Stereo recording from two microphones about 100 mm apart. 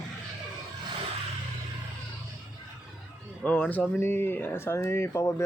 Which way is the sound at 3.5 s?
15° left (ahead or behind).